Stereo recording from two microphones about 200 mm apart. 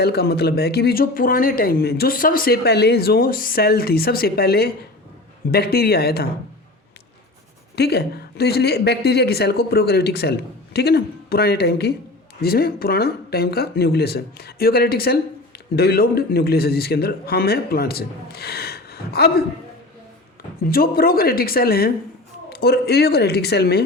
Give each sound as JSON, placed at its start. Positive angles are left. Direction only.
{"t": 0.0, "sound": "speech", "side_deg": 55}
{"t": 7.8, "sound": "speech", "side_deg": 55}
{"t": 20.7, "sound": "speech", "side_deg": 50}